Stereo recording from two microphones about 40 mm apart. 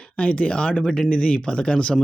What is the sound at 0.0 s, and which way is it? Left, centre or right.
Speech, left.